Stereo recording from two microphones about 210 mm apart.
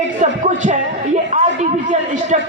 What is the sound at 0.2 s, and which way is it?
A man's voice, 35° right (ahead or behind).